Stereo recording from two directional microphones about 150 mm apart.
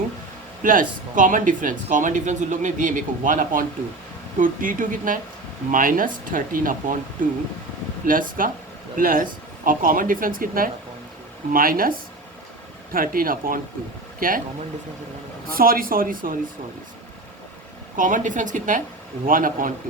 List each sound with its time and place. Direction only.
0.6 s speech: 65° right (ahead or behind)
8.0 s speech: 65° right (ahead or behind)
15.4 s speech: 75° right (ahead or behind)
17.9 s speech: 60° right (ahead or behind)